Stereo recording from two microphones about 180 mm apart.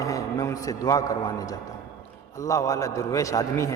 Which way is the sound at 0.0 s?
20° left (ahead or behind).